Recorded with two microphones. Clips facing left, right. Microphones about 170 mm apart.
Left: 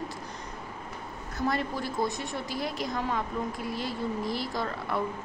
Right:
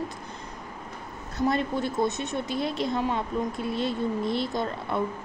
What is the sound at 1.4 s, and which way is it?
A woman's voice, 25° right (ahead or behind).